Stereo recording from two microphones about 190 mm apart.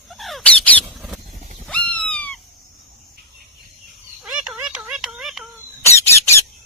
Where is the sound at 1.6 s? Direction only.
5° left (ahead or behind).